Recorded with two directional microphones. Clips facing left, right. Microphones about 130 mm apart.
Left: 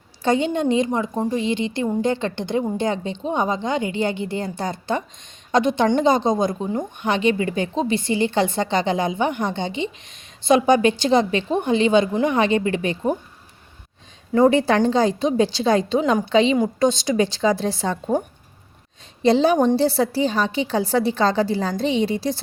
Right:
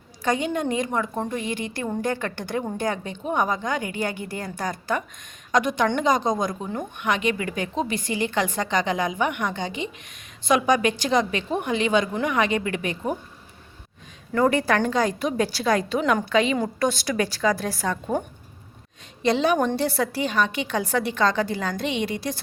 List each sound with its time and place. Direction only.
0.2 s a woman's voice: 30° left (ahead or behind)
14.3 s a woman's voice: 25° left (ahead or behind)
19.2 s a woman's voice: 30° left (ahead or behind)